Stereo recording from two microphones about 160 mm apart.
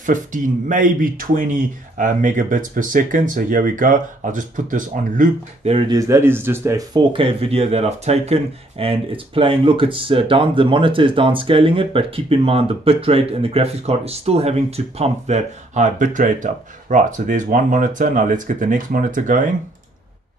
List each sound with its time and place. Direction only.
0.0 s speech: 55° right (ahead or behind)
5.7 s speech: 35° right (ahead or behind)
5.9 s speech: 20° right (ahead or behind)
7.1 s speech: 35° right (ahead or behind); by 19.5 s 55° right (ahead or behind)